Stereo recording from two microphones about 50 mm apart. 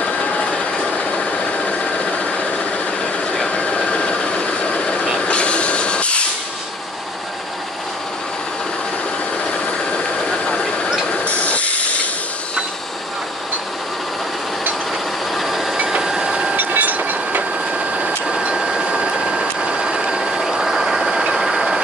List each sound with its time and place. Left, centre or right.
0.0 s vehicle: centre
3.5 s vehicle: centre
5.2 s a sound: left
11.1 s ratchet: left
15.3 s train: centre
16.0 s printer: centre
16.5 s train: right
18.4 s a sound: centre